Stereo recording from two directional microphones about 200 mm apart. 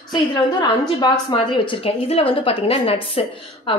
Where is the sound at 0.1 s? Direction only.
20° left (ahead or behind).